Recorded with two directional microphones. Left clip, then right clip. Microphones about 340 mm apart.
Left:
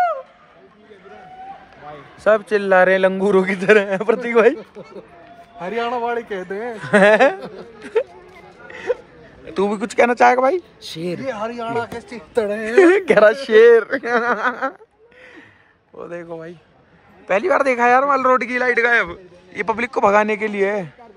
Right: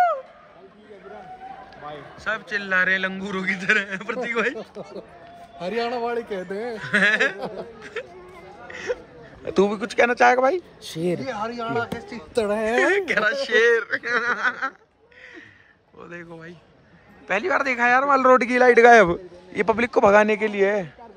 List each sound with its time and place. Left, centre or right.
2.2 s a man's voice: centre
4.6 s speech: right
5.9 s a man's voice: left
6.8 s a man's voice: centre
8.6 s a sound: centre
9.4 s a man's voice: centre
10.9 s a man's voice: centre
12.7 s a man's voice: centre
16.0 s a man's voice: centre